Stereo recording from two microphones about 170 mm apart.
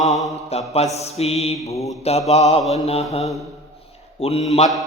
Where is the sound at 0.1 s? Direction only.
Centre (ahead or behind).